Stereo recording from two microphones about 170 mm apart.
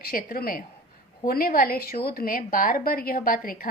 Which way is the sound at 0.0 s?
60° left (ahead or behind).